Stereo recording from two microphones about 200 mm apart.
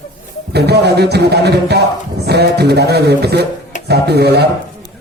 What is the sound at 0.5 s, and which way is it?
A man's voice, 55° right (ahead or behind).